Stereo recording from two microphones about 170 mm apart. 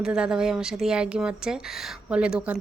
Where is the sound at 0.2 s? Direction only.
5° right (ahead or behind).